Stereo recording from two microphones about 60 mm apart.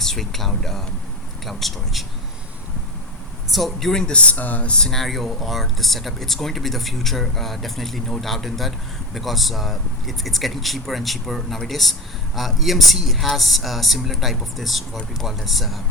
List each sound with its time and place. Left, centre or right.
0.0 s speech: centre
3.5 s speech: centre; by 4.7 s left
4.7 s speech: centre